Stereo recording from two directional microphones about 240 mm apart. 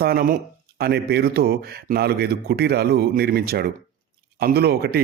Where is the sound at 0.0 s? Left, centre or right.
Right.